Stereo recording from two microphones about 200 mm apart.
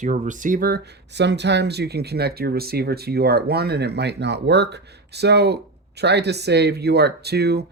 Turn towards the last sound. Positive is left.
turn(degrees=-55)  # may be behind; listen again after turning